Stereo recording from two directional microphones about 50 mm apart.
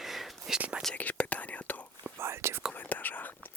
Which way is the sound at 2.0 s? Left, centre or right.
Right.